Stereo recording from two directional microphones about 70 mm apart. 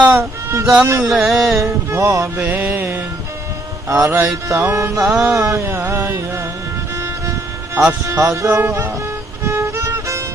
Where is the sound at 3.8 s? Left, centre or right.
Right.